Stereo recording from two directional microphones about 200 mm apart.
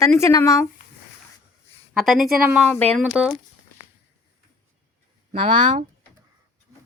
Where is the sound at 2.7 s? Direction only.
5° left (ahead or behind).